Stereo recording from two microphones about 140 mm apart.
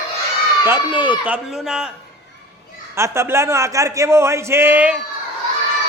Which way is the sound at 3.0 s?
20° right (ahead or behind).